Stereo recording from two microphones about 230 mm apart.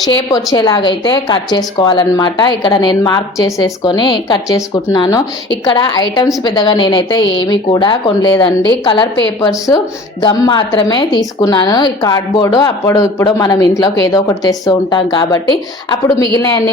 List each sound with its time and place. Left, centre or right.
0.3 s a woman's voice: centre